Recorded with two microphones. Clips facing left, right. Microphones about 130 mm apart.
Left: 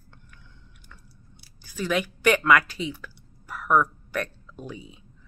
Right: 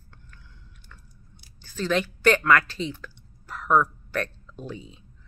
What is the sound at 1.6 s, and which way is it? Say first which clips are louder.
Speech: right 1 dB; 10° left (ahead or behind).